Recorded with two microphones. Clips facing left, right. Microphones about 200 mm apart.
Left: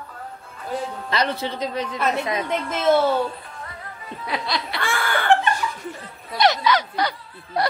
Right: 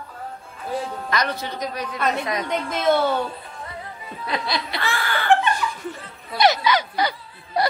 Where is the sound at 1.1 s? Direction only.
30° left (ahead or behind).